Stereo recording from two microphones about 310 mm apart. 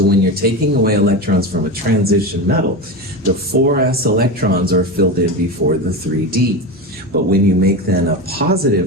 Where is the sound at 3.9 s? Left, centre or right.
Right.